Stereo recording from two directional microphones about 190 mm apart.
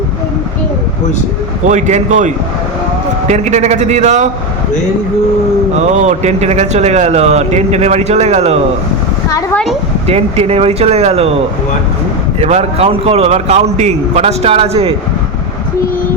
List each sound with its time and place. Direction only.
1.6 s a man's voice: 40° right (ahead or behind)
5.8 s a man's voice: 40° right (ahead or behind)
9.3 s a sound: 10° left (ahead or behind)
10.1 s a man's voice: 30° right (ahead or behind)
12.4 s a man's voice: 35° right (ahead or behind)